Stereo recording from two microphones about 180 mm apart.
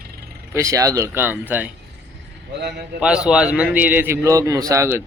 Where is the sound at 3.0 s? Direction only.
5° right (ahead or behind).